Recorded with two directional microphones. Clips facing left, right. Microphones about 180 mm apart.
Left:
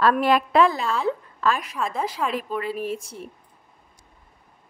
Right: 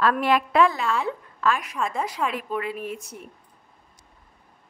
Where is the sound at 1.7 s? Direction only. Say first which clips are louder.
Left 1 dB; 5° left (ahead or behind).